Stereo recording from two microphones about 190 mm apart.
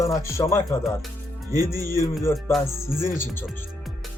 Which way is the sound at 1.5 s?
20° right (ahead or behind).